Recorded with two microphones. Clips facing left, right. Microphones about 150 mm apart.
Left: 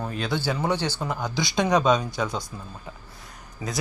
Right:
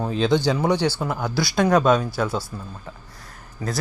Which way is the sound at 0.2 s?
20° right (ahead or behind).